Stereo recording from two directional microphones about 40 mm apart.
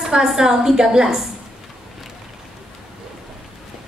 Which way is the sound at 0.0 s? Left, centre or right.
Centre.